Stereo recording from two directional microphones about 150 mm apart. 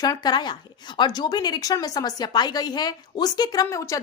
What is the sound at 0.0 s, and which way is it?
Speech, 25° left (ahead or behind).